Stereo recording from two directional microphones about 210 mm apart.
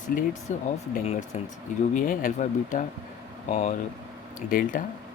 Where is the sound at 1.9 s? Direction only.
40° left (ahead or behind).